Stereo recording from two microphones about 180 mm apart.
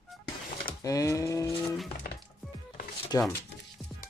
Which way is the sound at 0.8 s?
20° left (ahead or behind).